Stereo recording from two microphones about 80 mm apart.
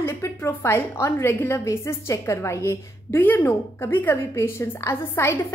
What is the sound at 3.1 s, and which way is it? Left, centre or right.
A woman's voice, left.